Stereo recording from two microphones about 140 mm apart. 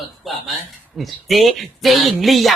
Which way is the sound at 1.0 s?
Centre (ahead or behind).